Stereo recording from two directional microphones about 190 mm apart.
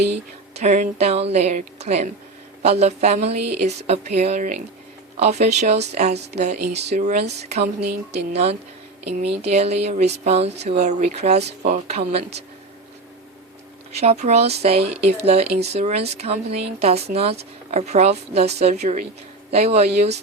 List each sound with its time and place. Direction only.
0.6 s speech: 40° right (ahead or behind)
7.8 s speech: 60° right (ahead or behind)
8.3 s speech: 35° right (ahead or behind)
13.9 s speech: 35° right (ahead or behind)